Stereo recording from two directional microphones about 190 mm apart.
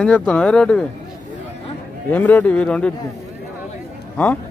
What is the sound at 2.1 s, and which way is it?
Speech, 10° left (ahead or behind).